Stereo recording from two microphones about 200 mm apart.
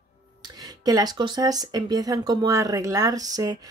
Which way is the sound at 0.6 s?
20° right (ahead or behind).